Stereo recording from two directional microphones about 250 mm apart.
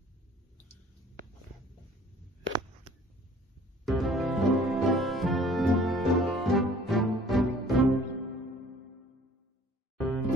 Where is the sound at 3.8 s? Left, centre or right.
Centre.